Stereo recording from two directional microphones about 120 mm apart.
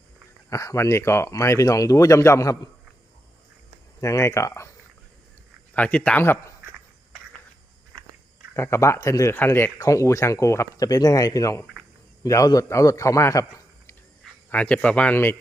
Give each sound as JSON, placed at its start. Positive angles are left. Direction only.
{"t": 0.5, "sound": "speech", "side_deg": 25}
{"t": 4.0, "sound": "speech", "side_deg": 25}
{"t": 5.7, "sound": "speech", "side_deg": 10}
{"t": 8.5, "sound": "speech", "side_deg": 25}
{"t": 14.5, "sound": "speech", "side_deg": 10}